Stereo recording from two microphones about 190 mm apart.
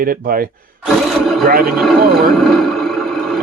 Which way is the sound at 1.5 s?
50° right (ahead or behind).